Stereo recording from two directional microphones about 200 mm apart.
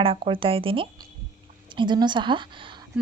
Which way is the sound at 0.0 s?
25° right (ahead or behind).